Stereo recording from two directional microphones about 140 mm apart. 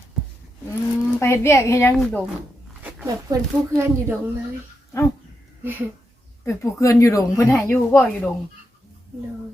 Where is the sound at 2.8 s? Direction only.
10° right (ahead or behind).